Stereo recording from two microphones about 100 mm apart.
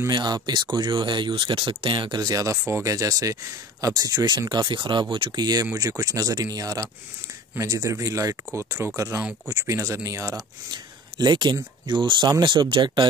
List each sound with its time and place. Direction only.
0.1 s speech: 50° right (ahead or behind); by 10.3 s 30° right (ahead or behind)
10.7 s speech: 45° right (ahead or behind)